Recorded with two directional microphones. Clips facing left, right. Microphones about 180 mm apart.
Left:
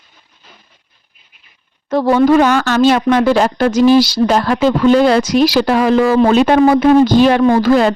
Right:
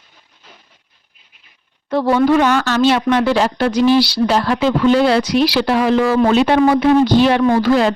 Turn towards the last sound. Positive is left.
turn(degrees=45)  # may be behind; listen again after turning